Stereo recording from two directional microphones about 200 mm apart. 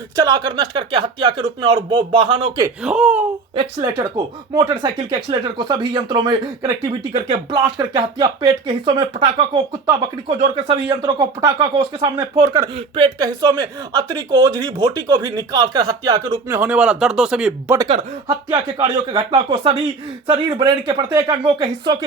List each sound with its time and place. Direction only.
0.2 s speech: 20° right (ahead or behind)
2.6 s speech: 5° right (ahead or behind)
3.5 s speech: 25° right (ahead or behind)
10.7 s speech: 20° right (ahead or behind); by 17.7 s 5° right (ahead or behind)
17.7 s speech: 25° right (ahead or behind)